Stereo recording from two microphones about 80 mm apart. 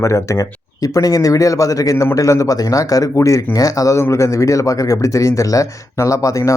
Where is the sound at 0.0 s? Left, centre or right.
Left.